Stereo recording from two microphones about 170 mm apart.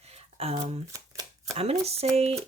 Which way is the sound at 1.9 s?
35° right (ahead or behind).